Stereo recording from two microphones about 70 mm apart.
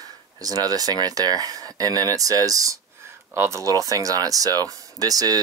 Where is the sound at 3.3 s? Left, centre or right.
Right.